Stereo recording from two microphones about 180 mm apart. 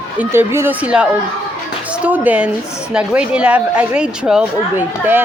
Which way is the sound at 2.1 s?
10° right (ahead or behind).